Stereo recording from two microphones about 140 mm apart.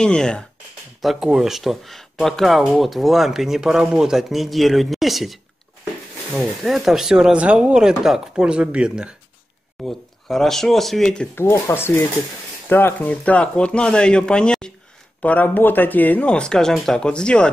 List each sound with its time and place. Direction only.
0.0 s speech: 5° left (ahead or behind)
11.3 s speech: 20° left (ahead or behind)